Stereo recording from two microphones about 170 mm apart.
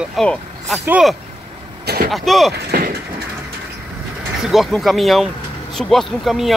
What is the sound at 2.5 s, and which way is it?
Speech, 60° right (ahead or behind).